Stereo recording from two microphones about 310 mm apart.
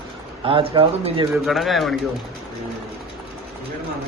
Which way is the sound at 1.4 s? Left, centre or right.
Centre.